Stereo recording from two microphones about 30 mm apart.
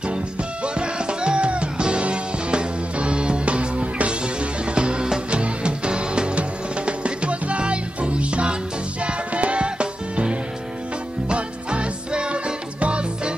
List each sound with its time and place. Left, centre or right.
0.7 s music: right